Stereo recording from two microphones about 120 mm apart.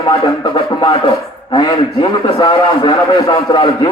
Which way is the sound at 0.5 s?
45° left (ahead or behind).